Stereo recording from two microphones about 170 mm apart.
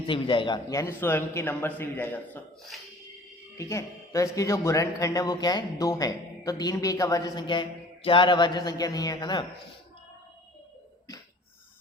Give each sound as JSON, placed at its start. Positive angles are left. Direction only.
{"t": 0.1, "sound": "a man's voice", "side_deg": 30}
{"t": 3.6, "sound": "a man's voice", "side_deg": 15}